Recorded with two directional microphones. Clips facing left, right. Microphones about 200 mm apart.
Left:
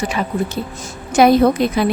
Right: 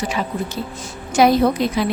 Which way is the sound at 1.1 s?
55° left (ahead or behind).